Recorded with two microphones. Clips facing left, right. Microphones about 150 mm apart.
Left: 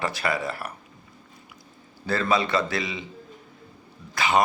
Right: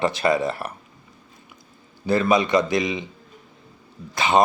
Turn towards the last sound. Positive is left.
turn(degrees=-25)  # may be behind; listen again after turning